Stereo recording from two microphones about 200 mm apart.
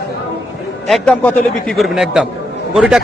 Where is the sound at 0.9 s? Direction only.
5° left (ahead or behind).